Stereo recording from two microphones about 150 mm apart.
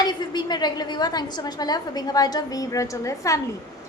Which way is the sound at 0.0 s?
25° left (ahead or behind).